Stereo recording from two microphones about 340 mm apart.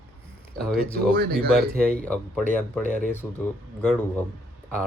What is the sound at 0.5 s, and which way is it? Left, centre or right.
Speech, right.